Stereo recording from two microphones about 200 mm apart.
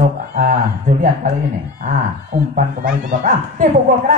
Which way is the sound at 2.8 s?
40° right (ahead or behind).